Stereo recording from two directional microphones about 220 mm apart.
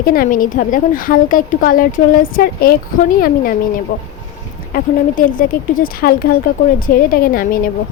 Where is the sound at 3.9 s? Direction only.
40° left (ahead or behind).